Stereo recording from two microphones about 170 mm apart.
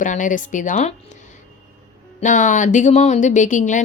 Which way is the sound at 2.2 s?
45° left (ahead or behind).